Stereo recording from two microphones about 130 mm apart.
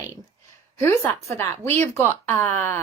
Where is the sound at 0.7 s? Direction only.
20° left (ahead or behind).